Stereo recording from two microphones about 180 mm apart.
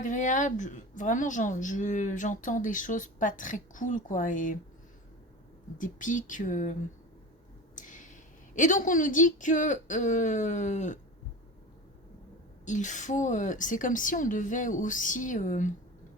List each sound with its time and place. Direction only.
0.0 s a woman's voice: 45° left (ahead or behind)
5.7 s a woman's voice: 45° left (ahead or behind)
7.8 s a woman's voice: 45° left (ahead or behind)
12.6 s a woman's voice: 45° left (ahead or behind)